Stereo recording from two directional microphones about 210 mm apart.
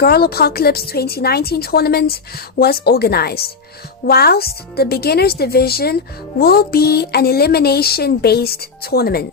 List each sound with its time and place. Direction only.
0.0 s speech: 45° left (ahead or behind)